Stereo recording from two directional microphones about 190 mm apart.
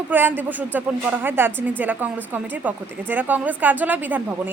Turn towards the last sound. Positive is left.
turn(degrees=-10)  # may be behind; listen again after turning